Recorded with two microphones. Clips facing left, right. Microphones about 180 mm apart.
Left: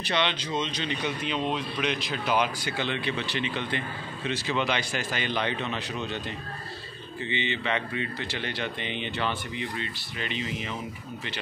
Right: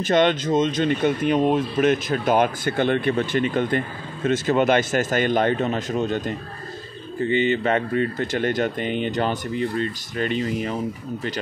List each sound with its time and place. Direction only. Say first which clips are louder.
0.0 s speech: right 10 dB; 45° right (ahead or behind)